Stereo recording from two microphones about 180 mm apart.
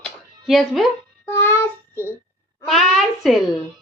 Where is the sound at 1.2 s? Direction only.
10° left (ahead or behind).